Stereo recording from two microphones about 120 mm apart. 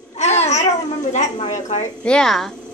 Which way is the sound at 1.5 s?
75° left (ahead or behind).